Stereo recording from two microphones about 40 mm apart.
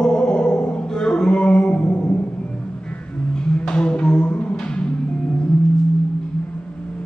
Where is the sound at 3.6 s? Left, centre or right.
Left.